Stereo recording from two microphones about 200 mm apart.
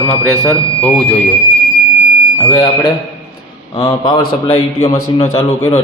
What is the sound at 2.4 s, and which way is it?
A man's voice, 25° left (ahead or behind).